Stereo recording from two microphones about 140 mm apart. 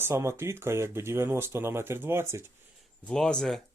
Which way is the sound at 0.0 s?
20° right (ahead or behind).